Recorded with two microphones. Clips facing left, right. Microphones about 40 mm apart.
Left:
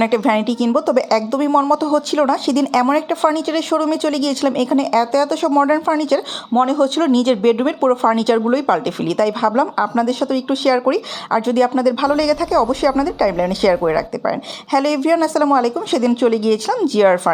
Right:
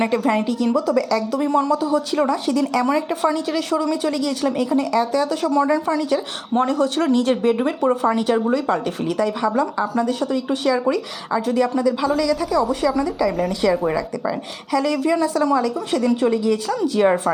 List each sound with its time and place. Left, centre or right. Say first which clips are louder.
0.0 s a woman's voice: left 4 dB; left
2.9 s speech: left 4 dB; left
5.5 s speech: left 3 dB; left
6.0 s speech: left 4 dB; left
6.6 s speech: left 4 dB; left
7.8 s a woman's voice: left 4 dB; left
9.9 s a woman's voice: left 3 dB; left
11.8 s a woman's voice: left 4 dB; left